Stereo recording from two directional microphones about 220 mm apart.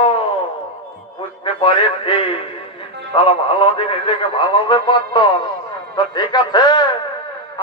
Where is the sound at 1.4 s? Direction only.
25° left (ahead or behind).